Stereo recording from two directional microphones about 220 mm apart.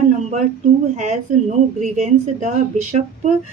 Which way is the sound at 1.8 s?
35° right (ahead or behind).